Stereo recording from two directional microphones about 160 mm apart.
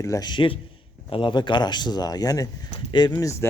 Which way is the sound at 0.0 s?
20° left (ahead or behind).